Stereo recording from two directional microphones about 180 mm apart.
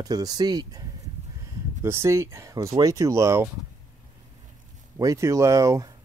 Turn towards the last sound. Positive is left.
turn(degrees=-15)  # may be behind; listen again after turning